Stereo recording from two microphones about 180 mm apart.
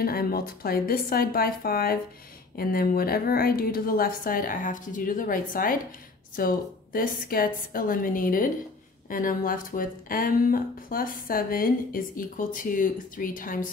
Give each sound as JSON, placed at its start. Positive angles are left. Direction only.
{"t": 0.0, "sound": "speech", "side_deg": 55}